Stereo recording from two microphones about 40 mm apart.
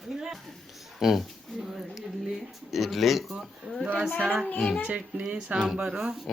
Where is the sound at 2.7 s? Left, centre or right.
Centre.